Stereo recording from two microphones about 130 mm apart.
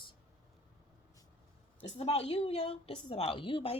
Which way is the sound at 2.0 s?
50° left (ahead or behind).